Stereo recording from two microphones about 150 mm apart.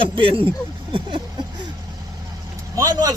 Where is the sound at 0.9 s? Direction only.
30° right (ahead or behind).